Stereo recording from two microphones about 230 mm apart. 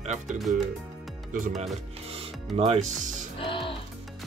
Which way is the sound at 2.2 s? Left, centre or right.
Right.